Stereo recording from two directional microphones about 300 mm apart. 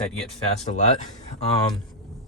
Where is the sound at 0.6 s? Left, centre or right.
Left.